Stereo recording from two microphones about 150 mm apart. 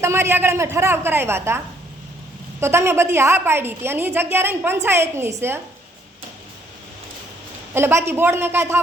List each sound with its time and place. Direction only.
0.0 s a woman's voice: 15° right (ahead or behind)
7.7 s a woman's voice: 15° right (ahead or behind)